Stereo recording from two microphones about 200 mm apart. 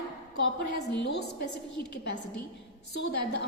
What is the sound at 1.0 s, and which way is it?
Speech, 55° left (ahead or behind).